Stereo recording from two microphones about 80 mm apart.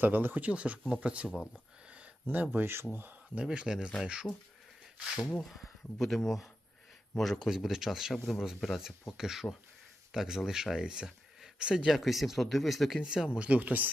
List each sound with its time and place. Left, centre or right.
0.0 s speech: right
1.3 s speech: centre
2.2 s speech: right
3.4 s speech: centre
6.0 s speech: centre; by 13.9 s right